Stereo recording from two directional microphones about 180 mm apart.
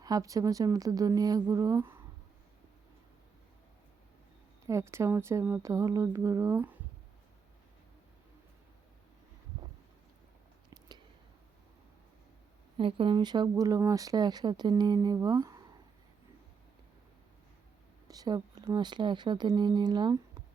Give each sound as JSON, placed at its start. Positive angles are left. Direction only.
{"t": 0.0, "sound": "speech", "side_deg": -20}
{"t": 4.6, "sound": "speech", "side_deg": -15}
{"t": 10.7, "sound": "a sound", "side_deg": -25}
{"t": 12.7, "sound": "speech", "side_deg": -30}
{"t": 18.1, "sound": "speech", "side_deg": -20}